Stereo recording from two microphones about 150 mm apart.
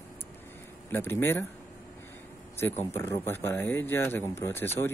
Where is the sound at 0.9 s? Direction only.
15° left (ahead or behind).